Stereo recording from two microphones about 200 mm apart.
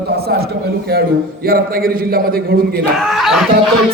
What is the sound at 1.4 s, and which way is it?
A man's voice, 50° right (ahead or behind).